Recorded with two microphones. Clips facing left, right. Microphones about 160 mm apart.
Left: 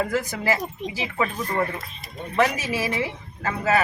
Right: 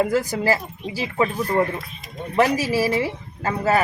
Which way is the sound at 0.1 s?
35° right (ahead or behind).